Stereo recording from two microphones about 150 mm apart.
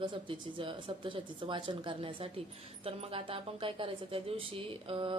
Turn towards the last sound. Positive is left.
turn(degrees=-35)  # may be behind; listen again after turning